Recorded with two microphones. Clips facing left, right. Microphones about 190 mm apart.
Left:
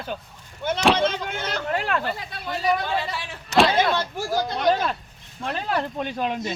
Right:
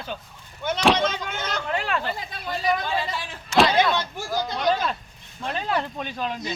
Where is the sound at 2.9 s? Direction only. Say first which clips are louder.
Even; 65° left (ahead or behind).